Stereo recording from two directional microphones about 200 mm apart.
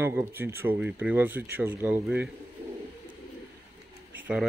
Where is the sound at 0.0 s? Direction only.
10° right (ahead or behind).